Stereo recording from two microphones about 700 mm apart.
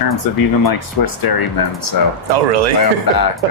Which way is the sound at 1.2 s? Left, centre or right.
Left.